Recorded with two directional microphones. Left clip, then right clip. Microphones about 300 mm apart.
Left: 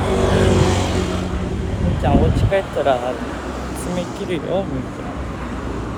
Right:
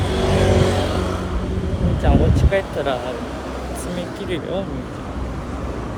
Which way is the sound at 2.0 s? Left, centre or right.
Centre.